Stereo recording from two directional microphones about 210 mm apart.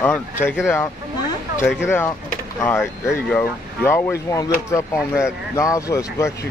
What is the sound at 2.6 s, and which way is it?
Speech, 10° left (ahead or behind).